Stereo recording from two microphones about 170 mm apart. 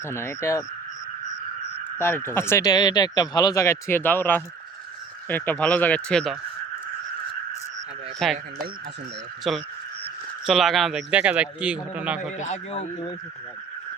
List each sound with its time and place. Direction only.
0.0 s speech: 15° left (ahead or behind)
2.0 s speech: 15° left (ahead or behind)
8.2 s speech: centre (ahead or behind)
9.5 s speech: centre (ahead or behind)
12.4 s a man's voice: 45° left (ahead or behind)